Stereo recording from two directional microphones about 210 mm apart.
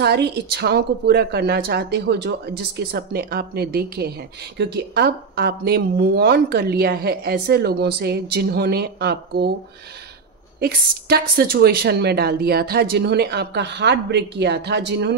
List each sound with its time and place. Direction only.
0.0 s speech: 50° right (ahead or behind)
10.6 s speech: 50° right (ahead or behind)